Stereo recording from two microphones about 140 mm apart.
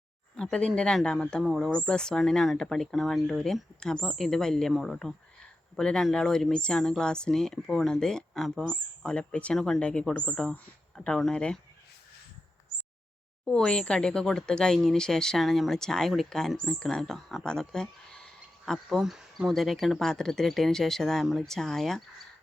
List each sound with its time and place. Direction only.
0.3 s speech: 5° left (ahead or behind)
13.4 s speech: 5° left (ahead or behind)